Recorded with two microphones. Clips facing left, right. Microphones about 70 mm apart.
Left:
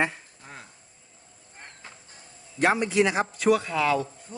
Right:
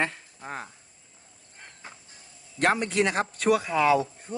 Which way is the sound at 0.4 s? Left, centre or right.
Right.